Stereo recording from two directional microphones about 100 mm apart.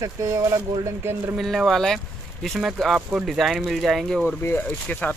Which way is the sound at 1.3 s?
5° right (ahead or behind).